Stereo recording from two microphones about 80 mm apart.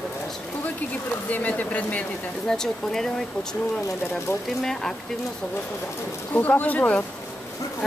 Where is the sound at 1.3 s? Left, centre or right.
Left.